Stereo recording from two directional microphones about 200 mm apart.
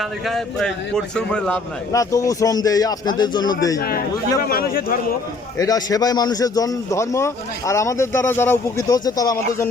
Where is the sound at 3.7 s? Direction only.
50° left (ahead or behind).